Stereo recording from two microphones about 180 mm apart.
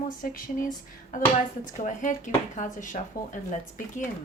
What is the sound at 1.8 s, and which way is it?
Speech, 45° left (ahead or behind).